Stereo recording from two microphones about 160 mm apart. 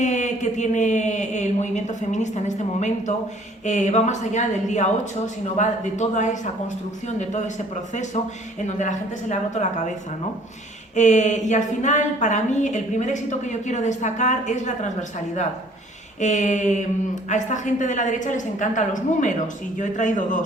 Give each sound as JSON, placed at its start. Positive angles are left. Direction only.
{"t": 0.0, "sound": "a woman's voice", "side_deg": 45}
{"t": 8.6, "sound": "a woman's voice", "side_deg": 50}
{"t": 10.9, "sound": "a woman's voice", "side_deg": 50}
{"t": 16.2, "sound": "a woman's voice", "side_deg": 50}